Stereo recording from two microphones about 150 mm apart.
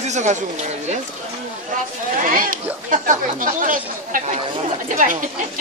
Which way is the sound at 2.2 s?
65° right (ahead or behind).